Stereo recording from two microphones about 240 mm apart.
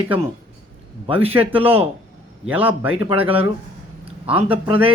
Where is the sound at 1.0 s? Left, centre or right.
Right.